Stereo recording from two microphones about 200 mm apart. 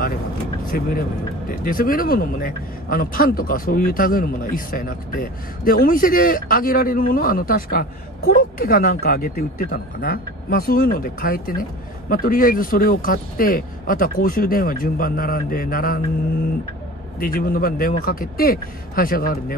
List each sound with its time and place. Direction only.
0.7 s speech: 45° left (ahead or behind)
17.2 s speech: 45° left (ahead or behind)